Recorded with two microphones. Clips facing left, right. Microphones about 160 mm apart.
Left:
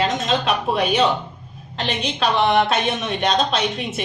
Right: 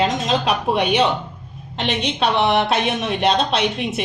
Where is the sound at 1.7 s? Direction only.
75° right (ahead or behind).